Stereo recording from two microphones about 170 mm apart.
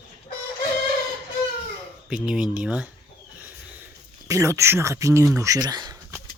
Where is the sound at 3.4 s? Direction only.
10° right (ahead or behind).